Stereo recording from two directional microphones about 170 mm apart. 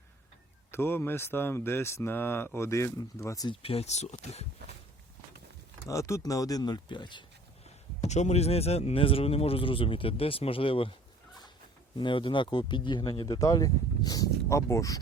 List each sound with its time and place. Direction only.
0.7 s speech: 15° left (ahead or behind)
3.5 s speech: 35° left (ahead or behind)
5.9 s speech: 15° left (ahead or behind)
8.0 s speech: 40° left (ahead or behind)
11.9 s speech: 30° left (ahead or behind)